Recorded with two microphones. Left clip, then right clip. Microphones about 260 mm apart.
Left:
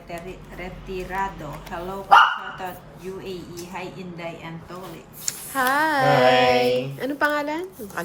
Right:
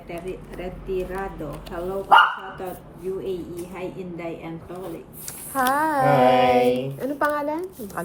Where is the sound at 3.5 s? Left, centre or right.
Left.